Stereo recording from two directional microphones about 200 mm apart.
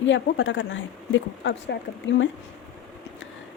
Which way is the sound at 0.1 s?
65° left (ahead or behind).